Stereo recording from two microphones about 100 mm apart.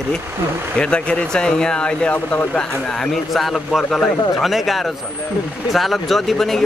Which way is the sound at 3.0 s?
Centre (ahead or behind).